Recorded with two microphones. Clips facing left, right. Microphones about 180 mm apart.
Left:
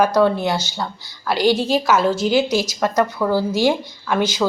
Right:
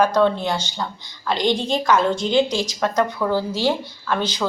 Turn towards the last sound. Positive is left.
turn(degrees=10)  # may be behind; listen again after turning